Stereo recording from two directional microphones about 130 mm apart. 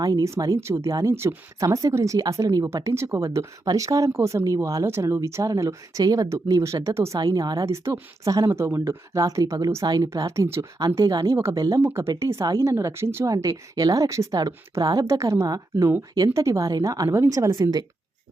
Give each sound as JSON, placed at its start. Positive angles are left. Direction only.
{"t": 0.0, "sound": "speech", "side_deg": -30}
{"t": 7.2, "sound": "speech", "side_deg": -30}